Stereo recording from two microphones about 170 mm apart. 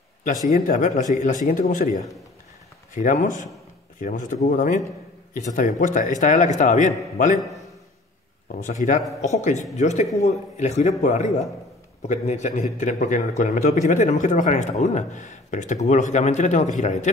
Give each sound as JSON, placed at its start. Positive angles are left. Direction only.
{"t": 0.5, "sound": "a man's voice", "side_deg": 50}
{"t": 8.5, "sound": "a man's voice", "side_deg": 45}